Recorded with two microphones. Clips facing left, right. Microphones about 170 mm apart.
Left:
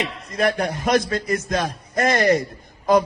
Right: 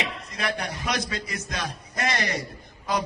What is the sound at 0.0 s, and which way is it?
A man's voice, 50° left (ahead or behind).